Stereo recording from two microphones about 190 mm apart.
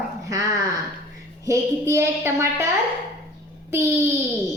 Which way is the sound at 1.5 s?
15° right (ahead or behind).